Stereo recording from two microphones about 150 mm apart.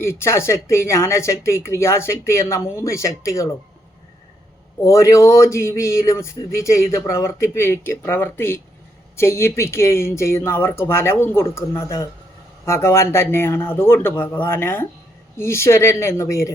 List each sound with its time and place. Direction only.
0.0 s speech: 15° left (ahead or behind)
4.8 s speech: 20° left (ahead or behind)